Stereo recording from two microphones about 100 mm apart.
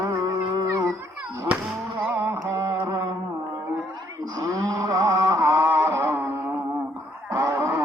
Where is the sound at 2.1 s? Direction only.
30° right (ahead or behind).